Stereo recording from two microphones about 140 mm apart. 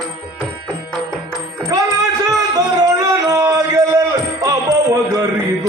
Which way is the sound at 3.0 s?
25° right (ahead or behind).